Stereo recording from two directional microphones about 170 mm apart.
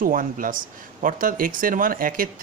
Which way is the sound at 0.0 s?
55° right (ahead or behind).